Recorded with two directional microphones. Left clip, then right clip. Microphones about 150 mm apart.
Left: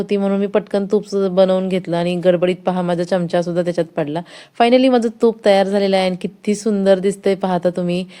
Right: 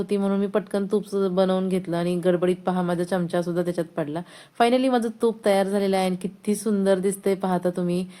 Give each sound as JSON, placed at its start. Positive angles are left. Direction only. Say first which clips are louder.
{"t": 0.0, "sound": "speech", "louder": "left 6 dB", "side_deg": 35}